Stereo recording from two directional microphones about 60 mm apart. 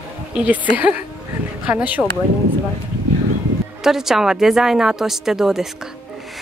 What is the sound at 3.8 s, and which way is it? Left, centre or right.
A woman's voice, centre.